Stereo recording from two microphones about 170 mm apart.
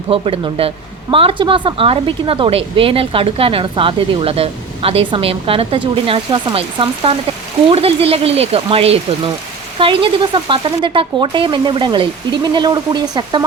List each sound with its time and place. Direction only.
0.1 s a woman's voice: 35° right (ahead or behind)